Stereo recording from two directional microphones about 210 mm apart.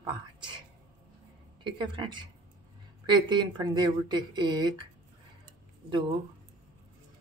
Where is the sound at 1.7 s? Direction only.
20° right (ahead or behind).